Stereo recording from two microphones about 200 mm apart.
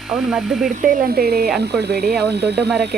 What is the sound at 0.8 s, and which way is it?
Speech, 40° right (ahead or behind).